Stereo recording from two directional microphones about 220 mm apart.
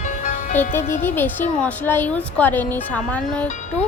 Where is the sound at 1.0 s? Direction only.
10° left (ahead or behind).